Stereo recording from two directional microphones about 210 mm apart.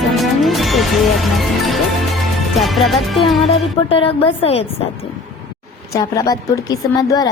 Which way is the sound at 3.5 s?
25° left (ahead or behind).